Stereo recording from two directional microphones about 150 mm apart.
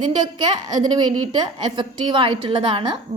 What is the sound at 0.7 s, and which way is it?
A woman's voice, 30° right (ahead or behind).